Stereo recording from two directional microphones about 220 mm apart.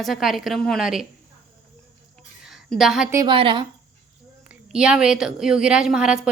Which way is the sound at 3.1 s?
20° right (ahead or behind).